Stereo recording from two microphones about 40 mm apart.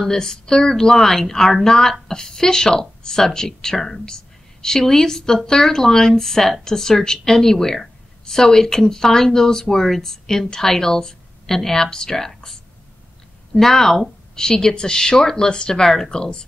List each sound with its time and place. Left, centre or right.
0.0 s speech: centre
13.6 s speech: centre